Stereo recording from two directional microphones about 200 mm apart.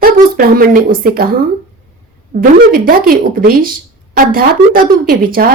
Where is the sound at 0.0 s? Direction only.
45° right (ahead or behind).